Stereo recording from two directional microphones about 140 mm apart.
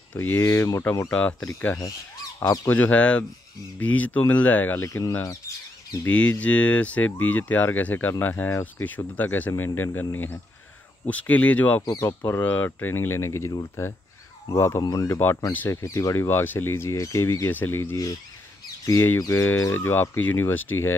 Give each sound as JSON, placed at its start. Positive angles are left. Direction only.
{"t": 0.1, "sound": "speech", "side_deg": 15}
{"t": 2.4, "sound": "speech", "side_deg": 20}
{"t": 6.1, "sound": "speech", "side_deg": 10}
{"t": 11.8, "sound": "speech", "side_deg": 25}
{"t": 12.3, "sound": "speech", "side_deg": 15}
{"t": 15.5, "sound": "speech", "side_deg": 20}